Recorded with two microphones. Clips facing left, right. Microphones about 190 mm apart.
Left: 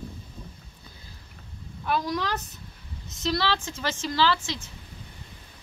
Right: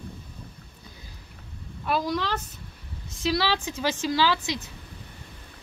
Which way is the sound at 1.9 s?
Centre (ahead or behind).